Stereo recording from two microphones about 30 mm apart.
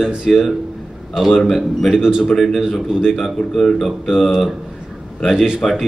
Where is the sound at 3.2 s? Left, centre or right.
Centre.